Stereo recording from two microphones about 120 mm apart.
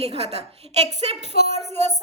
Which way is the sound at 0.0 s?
60° right (ahead or behind).